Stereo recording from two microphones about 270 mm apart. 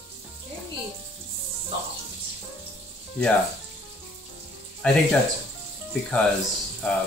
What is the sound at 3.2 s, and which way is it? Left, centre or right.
Speech, centre.